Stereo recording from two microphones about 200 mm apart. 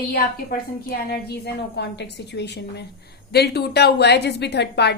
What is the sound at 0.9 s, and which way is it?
A woman's voice, 55° left (ahead or behind).